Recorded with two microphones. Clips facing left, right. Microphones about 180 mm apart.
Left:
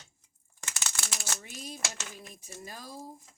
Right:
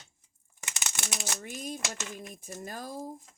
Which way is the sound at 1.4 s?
50° right (ahead or behind).